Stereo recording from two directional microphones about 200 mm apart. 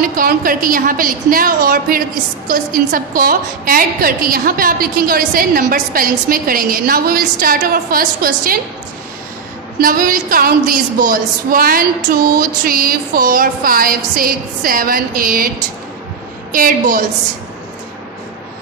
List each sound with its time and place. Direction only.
0.0 s a woman's voice: 45° right (ahead or behind)
9.8 s a woman's voice: 45° right (ahead or behind)
16.5 s a woman's voice: 45° right (ahead or behind)